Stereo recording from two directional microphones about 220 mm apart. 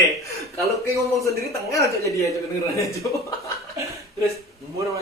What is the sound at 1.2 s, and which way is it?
A man's voice, 15° left (ahead or behind).